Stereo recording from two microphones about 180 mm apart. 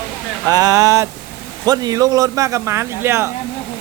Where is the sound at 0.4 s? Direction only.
20° right (ahead or behind).